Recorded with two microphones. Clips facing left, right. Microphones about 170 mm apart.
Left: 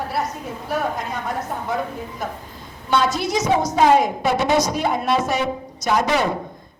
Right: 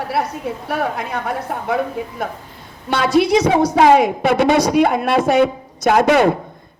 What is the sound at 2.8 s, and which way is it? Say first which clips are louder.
A woman's voice: right 5 dB; 60° right (ahead or behind).